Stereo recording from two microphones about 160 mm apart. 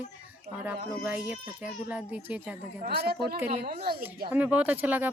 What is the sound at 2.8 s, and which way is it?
A woman's voice, 75° right (ahead or behind).